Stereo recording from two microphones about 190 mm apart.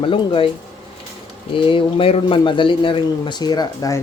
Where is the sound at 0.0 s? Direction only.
25° left (ahead or behind).